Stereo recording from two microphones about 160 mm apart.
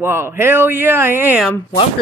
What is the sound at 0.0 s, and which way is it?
A man's voice, 15° right (ahead or behind).